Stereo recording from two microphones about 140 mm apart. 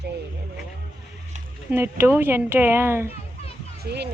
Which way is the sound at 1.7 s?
15° right (ahead or behind).